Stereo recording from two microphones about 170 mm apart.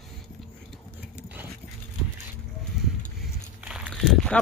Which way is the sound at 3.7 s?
5° right (ahead or behind).